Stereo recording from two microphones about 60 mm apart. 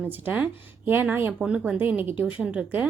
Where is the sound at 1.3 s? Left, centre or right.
Centre.